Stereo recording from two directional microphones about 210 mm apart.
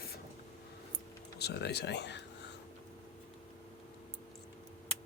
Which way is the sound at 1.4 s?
50° left (ahead or behind).